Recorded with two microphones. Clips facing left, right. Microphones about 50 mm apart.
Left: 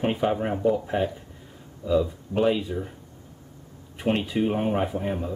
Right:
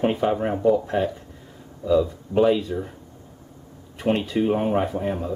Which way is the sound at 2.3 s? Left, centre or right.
Centre.